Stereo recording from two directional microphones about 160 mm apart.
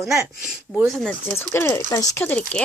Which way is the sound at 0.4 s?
Centre (ahead or behind).